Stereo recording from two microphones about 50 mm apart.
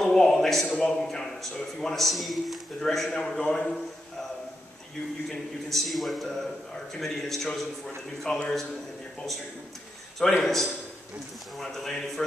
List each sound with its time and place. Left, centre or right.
0.0 s a sound: centre
0.7 s a man's voice: centre
5.3 s a man's voice: centre
10.4 s a man's voice: centre